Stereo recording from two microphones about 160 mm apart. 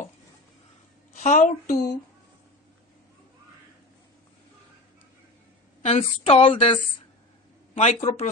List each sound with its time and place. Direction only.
1.1 s a woman's voice: 50° left (ahead or behind)
5.8 s a woman's voice: 40° left (ahead or behind)
7.7 s speech: 45° left (ahead or behind)